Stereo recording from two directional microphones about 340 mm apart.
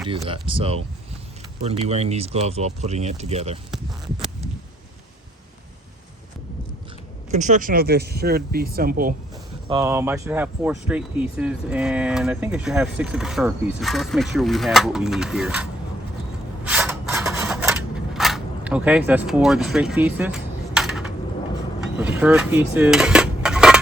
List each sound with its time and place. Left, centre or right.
0.1 s speech: centre
3.7 s speech: centre
7.3 s speech: right
9.6 s speech: centre
16.6 s a sound: centre